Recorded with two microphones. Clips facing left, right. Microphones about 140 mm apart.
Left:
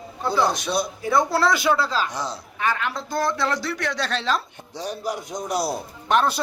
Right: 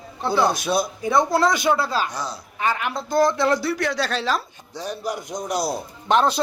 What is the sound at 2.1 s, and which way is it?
Speech, 20° left (ahead or behind).